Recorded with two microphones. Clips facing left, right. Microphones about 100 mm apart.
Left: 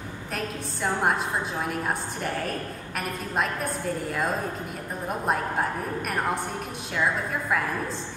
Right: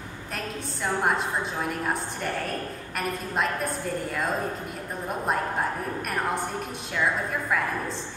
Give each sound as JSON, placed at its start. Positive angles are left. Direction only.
{"t": 0.8, "sound": "a woman's voice", "side_deg": 0}
{"t": 3.0, "sound": "a woman's voice", "side_deg": 0}